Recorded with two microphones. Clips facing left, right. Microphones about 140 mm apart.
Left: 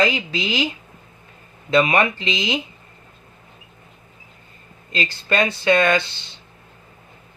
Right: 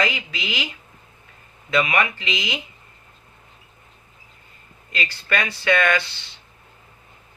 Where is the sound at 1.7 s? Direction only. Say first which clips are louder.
Left 4 dB; 30° left (ahead or behind).